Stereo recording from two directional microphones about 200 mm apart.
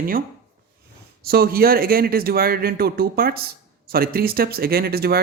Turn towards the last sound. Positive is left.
turn(degrees=-50)  # may be behind; listen again after turning